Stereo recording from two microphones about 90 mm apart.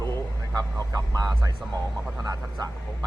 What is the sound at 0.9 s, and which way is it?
A man's voice, 45° right (ahead or behind).